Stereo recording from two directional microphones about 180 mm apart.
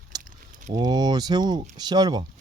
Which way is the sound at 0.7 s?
20° right (ahead or behind).